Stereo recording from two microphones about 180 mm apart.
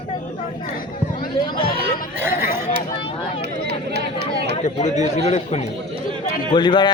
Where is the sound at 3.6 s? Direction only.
65° right (ahead or behind).